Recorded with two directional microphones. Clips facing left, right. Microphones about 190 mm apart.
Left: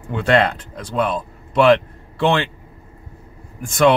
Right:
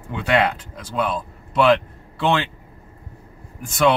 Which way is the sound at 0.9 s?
50° left (ahead or behind).